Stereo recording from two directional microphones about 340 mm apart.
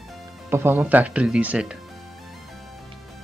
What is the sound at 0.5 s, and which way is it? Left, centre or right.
Speech, centre.